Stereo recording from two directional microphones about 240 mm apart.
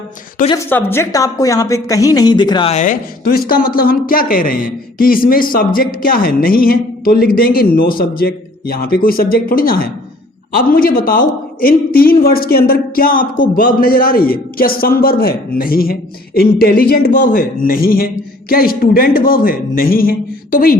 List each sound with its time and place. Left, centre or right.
0.7 s a woman's voice: centre; by 20.7 s left